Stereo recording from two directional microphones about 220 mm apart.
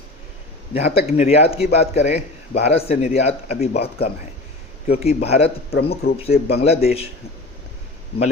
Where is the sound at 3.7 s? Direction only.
45° left (ahead or behind).